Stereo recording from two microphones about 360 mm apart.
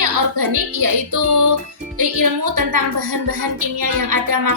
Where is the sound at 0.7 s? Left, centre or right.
Right.